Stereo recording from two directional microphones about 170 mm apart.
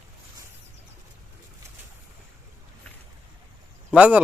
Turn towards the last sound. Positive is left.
turn(degrees=-10)  # may be behind; listen again after turning